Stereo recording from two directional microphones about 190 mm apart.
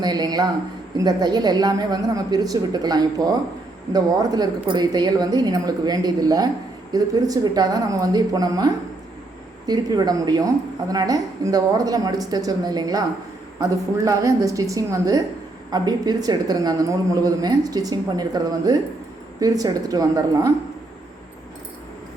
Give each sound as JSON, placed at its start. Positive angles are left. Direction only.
{"t": 0.0, "sound": "a man's voice", "side_deg": -20}